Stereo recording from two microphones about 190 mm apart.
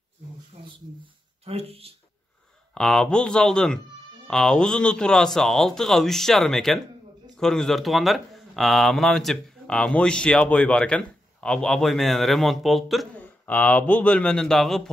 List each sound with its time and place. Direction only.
1.4 s speech: 30° right (ahead or behind)
2.7 s a man's voice: 5° left (ahead or behind)